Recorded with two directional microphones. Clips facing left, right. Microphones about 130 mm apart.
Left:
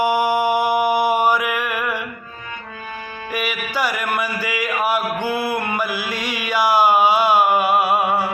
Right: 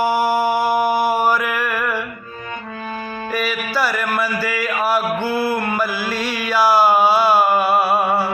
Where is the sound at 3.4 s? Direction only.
15° left (ahead or behind).